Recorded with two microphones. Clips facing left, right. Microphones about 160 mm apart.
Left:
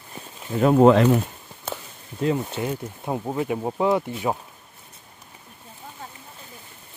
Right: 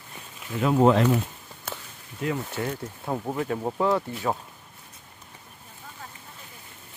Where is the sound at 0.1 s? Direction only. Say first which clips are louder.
Left 5 dB; 35° left (ahead or behind).